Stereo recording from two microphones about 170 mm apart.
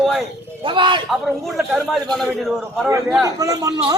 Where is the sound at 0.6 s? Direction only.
30° right (ahead or behind).